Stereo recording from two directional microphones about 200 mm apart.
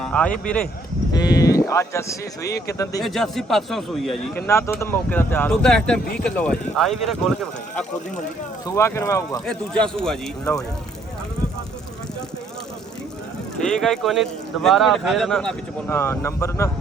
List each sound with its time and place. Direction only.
0.0 s speech: 5° left (ahead or behind)
1.1 s speech: 20° left (ahead or behind)
3.0 s speech: centre (ahead or behind)
4.4 s speech: 15° left (ahead or behind)
8.6 s speech: 15° left (ahead or behind)
9.5 s speech: 5° left (ahead or behind)
13.7 s speech: centre (ahead or behind)